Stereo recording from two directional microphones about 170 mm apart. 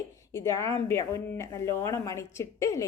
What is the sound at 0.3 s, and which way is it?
Music, 15° left (ahead or behind).